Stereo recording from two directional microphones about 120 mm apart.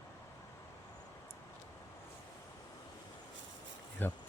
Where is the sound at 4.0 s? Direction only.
15° left (ahead or behind).